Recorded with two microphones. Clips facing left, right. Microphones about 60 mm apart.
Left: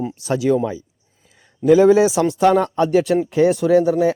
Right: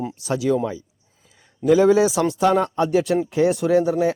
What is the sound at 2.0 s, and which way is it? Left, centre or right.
Speech, left.